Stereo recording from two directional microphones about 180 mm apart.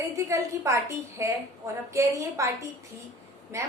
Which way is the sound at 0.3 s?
15° right (ahead or behind).